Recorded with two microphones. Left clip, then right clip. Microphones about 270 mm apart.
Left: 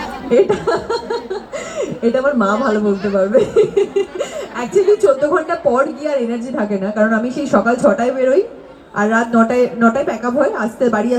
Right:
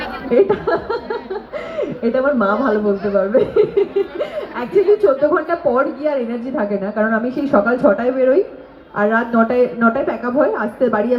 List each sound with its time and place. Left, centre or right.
0.3 s speech: left